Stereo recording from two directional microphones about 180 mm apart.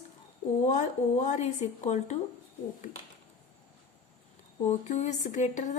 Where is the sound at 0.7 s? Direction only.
40° left (ahead or behind).